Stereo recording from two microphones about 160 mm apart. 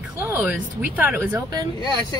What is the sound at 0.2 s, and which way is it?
Speech, 15° right (ahead or behind).